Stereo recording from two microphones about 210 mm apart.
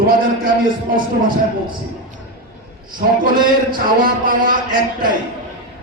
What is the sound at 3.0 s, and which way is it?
A man's voice, 40° right (ahead or behind).